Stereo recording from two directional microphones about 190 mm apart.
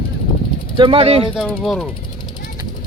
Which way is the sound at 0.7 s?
30° right (ahead or behind).